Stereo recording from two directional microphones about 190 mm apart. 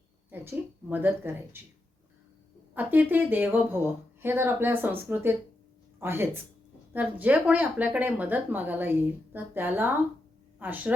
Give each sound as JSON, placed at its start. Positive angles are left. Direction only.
{"t": 0.3, "sound": "speech", "side_deg": -10}
{"t": 2.7, "sound": "speech", "side_deg": -10}